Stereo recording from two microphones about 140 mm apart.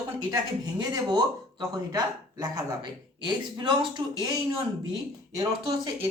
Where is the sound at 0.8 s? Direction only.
30° right (ahead or behind).